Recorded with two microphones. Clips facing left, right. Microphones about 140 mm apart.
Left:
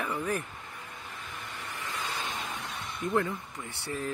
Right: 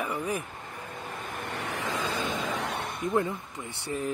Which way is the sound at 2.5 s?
70° right (ahead or behind).